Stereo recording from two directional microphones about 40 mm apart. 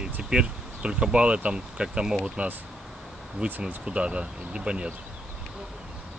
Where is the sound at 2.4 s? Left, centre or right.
Right.